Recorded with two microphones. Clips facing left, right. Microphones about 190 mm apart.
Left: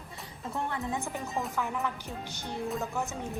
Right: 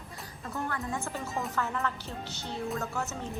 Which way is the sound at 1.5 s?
15° left (ahead or behind).